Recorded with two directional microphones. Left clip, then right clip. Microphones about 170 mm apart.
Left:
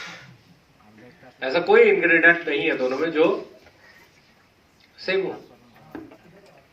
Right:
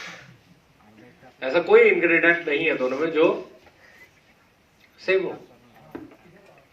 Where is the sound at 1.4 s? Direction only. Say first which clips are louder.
Even; 20° left (ahead or behind).